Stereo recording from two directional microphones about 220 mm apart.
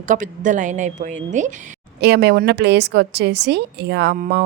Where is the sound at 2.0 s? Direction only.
50° right (ahead or behind).